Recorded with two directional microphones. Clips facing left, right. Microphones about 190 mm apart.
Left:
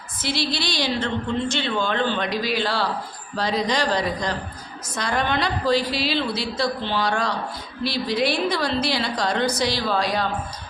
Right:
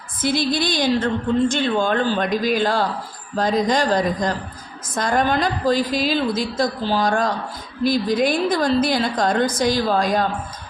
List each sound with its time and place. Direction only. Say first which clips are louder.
0.2 s a woman's voice: right 6 dB; 50° right (ahead or behind)